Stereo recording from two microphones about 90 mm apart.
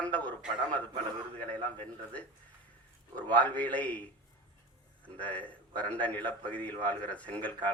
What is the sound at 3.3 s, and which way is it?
Speech, 15° left (ahead or behind).